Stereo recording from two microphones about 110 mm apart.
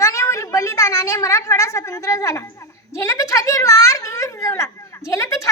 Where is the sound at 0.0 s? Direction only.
25° left (ahead or behind).